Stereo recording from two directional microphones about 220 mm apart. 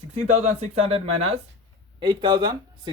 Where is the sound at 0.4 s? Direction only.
30° right (ahead or behind).